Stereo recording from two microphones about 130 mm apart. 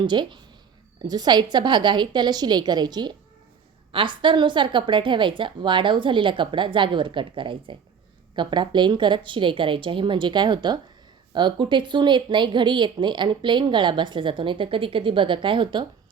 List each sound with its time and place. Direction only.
0.0 s speech: 35° right (ahead or behind)